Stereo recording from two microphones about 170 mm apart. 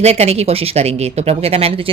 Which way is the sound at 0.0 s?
40° right (ahead or behind).